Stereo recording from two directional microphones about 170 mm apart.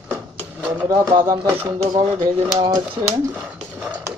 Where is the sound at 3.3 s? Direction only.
10° right (ahead or behind).